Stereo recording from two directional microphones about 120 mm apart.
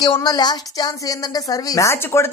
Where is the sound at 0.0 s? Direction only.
35° left (ahead or behind).